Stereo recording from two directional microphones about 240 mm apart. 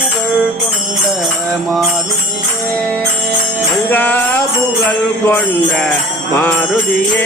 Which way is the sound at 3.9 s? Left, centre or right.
Centre.